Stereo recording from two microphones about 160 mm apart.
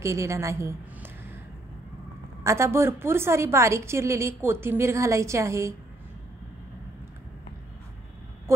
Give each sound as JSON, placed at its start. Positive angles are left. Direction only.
{"t": 0.0, "sound": "a woman's voice", "side_deg": -20}
{"t": 2.4, "sound": "a woman's voice", "side_deg": -15}